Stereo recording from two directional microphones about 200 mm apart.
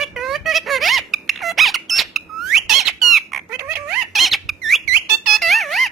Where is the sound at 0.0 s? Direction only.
Centre (ahead or behind).